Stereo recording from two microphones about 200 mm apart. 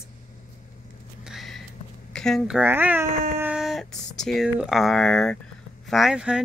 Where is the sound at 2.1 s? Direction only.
Centre (ahead or behind).